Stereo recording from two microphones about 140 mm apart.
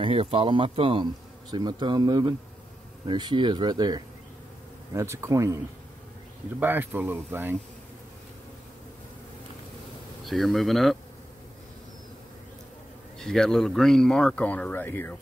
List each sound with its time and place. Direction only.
0.0 s speech: 45° right (ahead or behind); by 5.6 s 20° right (ahead or behind)
6.6 s speech: 15° right (ahead or behind)
10.2 s speech: centre (ahead or behind)
13.2 s speech: 5° left (ahead or behind)